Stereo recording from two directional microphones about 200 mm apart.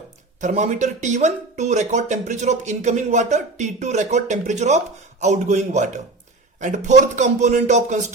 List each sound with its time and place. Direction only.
0.4 s speech: 35° right (ahead or behind)